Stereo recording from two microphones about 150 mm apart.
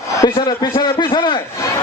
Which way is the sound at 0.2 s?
25° left (ahead or behind).